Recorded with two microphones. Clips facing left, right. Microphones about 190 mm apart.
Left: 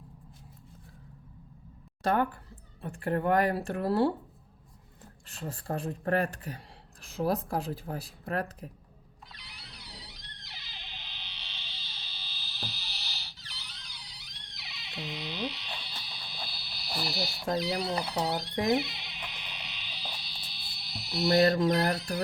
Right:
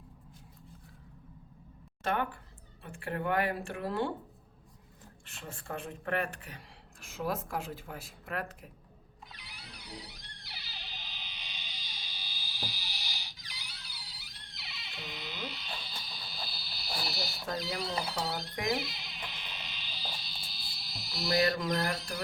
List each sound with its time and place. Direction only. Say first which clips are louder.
2.8 s speech: left 6 dB; 40° left (ahead or behind)
5.3 s speech: left 6 dB; 35° left (ahead or behind)
10.2 s a sound: even; 10° right (ahead or behind)
18.7 s sheep: left 6 dB; centre (ahead or behind)
21.4 s speech: left 6 dB; 35° left (ahead or behind)